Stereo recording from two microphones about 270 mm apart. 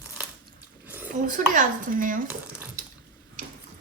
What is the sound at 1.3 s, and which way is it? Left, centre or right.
Speech, right.